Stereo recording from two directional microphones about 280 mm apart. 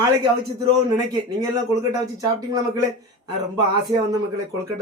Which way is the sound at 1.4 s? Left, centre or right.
Centre.